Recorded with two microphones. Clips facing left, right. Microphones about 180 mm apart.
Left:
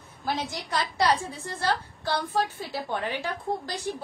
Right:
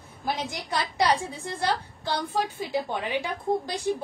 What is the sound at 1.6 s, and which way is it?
A woman's voice, 15° right (ahead or behind).